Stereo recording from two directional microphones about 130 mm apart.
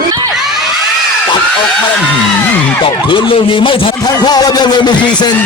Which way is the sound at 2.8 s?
40° left (ahead or behind).